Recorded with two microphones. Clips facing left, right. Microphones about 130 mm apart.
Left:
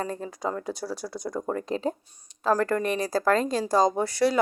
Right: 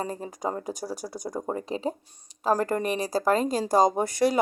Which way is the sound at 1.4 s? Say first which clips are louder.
Left 1 dB; 20° right (ahead or behind).